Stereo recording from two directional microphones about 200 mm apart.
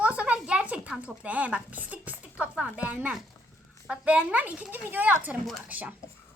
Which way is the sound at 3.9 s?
5° right (ahead or behind).